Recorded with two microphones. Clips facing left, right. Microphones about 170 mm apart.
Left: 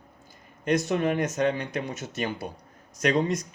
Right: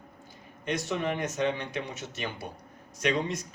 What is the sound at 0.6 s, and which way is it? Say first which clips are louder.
Speech: left 6 dB; 45° left (ahead or behind).